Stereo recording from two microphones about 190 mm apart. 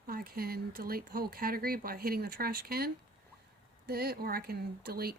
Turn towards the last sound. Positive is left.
turn(degrees=-55)  # may be behind; listen again after turning